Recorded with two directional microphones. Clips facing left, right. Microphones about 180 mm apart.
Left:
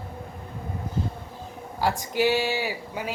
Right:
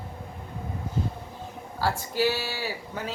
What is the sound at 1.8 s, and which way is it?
Speech, 15° left (ahead or behind).